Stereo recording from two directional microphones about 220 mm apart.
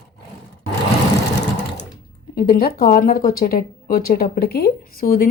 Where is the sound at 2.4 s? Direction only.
40° left (ahead or behind).